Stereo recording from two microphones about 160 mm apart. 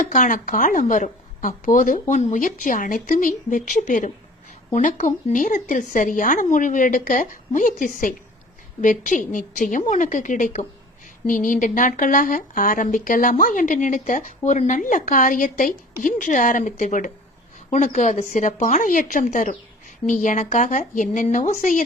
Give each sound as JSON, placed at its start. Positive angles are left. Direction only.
{"t": 0.0, "sound": "a woman's voice", "side_deg": 55}